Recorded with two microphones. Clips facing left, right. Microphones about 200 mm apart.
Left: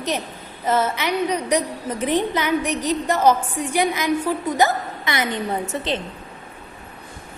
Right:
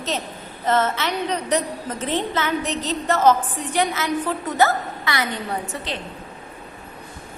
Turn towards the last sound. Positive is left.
turn(degrees=20)  # may be behind; listen again after turning